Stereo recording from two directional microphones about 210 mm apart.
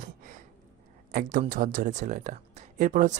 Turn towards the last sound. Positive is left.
turn(degrees=-35)  # may be behind; listen again after turning